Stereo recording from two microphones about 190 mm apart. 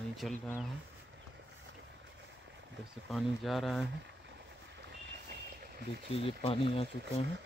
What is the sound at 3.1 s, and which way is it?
Speech, centre (ahead or behind).